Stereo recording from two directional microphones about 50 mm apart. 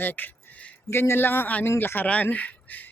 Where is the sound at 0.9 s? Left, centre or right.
Left.